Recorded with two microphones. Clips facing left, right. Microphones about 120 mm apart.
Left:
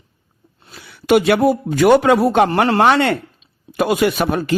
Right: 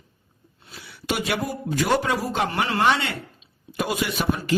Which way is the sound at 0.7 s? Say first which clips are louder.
Left 13 dB; 60° left (ahead or behind).